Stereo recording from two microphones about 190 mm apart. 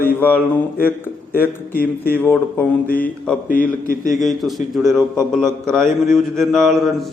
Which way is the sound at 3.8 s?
45° left (ahead or behind).